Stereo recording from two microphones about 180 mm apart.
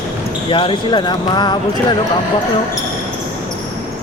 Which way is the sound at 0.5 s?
30° left (ahead or behind).